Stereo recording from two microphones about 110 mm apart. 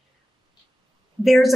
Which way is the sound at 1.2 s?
Centre (ahead or behind).